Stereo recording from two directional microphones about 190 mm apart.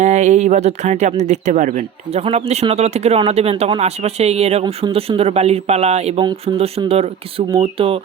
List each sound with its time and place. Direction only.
0.0 s speech: 40° right (ahead or behind)